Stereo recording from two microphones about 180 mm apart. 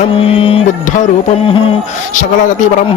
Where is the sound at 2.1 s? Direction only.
45° left (ahead or behind).